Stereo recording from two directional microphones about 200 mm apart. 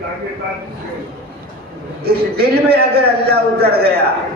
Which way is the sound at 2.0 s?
50° right (ahead or behind).